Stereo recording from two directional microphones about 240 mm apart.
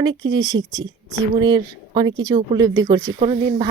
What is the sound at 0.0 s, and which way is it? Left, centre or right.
Speech, centre.